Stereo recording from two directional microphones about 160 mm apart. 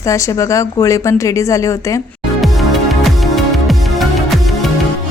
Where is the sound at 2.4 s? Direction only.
Centre (ahead or behind).